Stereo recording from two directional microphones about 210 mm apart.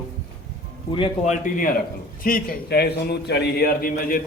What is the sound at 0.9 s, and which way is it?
A man's voice, 30° left (ahead or behind).